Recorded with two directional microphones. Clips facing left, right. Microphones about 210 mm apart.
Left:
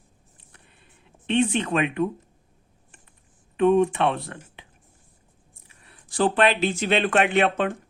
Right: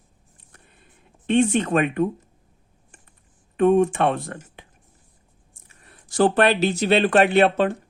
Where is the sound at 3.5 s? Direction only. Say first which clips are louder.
Right 2 dB; 45° right (ahead or behind).